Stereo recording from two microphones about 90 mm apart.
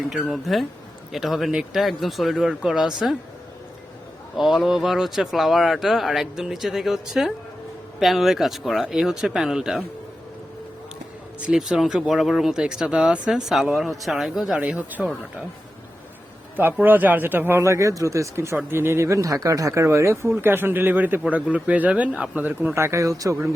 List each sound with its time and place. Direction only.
0.1 s speech: centre (ahead or behind)
4.4 s speech: centre (ahead or behind)
11.3 s speech: 10° right (ahead or behind)
14.6 s speech: 15° right (ahead or behind)
16.8 s speech: 20° right (ahead or behind); by 23.4 s 40° right (ahead or behind)